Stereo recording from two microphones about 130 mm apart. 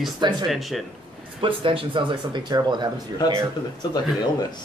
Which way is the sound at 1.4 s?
40° right (ahead or behind).